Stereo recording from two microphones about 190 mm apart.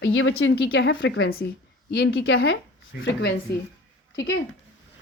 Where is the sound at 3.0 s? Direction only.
70° left (ahead or behind).